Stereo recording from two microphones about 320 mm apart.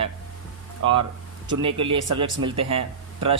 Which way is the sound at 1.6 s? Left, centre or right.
Centre.